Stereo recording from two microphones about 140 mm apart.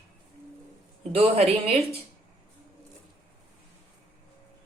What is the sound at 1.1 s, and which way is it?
Speech, 45° right (ahead or behind).